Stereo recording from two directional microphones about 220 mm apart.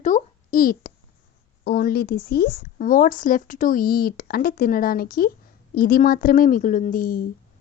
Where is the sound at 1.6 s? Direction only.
45° left (ahead or behind).